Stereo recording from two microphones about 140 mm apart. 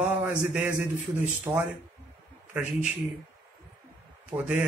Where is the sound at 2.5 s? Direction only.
10° right (ahead or behind).